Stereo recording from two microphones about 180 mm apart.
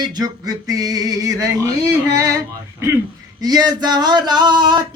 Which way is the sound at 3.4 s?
20° right (ahead or behind).